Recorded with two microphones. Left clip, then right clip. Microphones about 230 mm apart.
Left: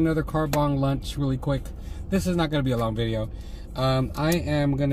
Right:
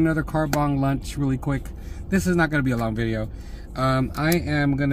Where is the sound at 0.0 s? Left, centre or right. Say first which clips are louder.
Right 2 dB; centre.